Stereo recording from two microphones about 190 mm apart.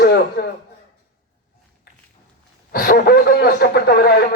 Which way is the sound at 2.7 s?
50° left (ahead or behind).